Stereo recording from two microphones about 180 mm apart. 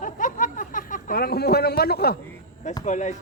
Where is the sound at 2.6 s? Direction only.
40° left (ahead or behind).